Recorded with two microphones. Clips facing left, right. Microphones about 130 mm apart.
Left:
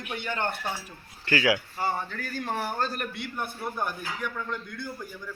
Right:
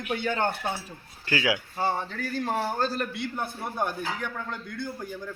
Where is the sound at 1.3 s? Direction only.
20° right (ahead or behind).